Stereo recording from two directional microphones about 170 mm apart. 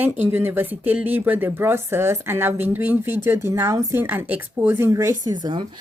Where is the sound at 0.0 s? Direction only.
10° right (ahead or behind).